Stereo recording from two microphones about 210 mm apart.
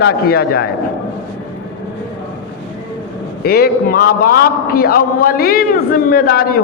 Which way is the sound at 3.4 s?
45° left (ahead or behind).